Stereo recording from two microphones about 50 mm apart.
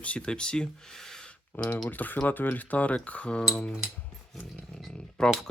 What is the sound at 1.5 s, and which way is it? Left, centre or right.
Speech, left.